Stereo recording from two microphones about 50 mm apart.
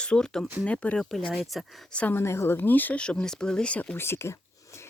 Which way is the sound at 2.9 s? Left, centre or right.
Left.